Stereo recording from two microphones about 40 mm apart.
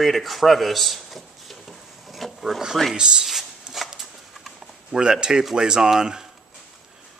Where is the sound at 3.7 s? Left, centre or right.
Centre.